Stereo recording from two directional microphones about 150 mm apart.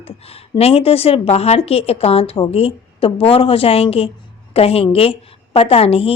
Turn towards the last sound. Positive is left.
turn(degrees=40)  # may be behind; listen again after turning